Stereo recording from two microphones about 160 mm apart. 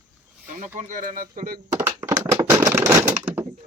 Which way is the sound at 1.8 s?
20° right (ahead or behind).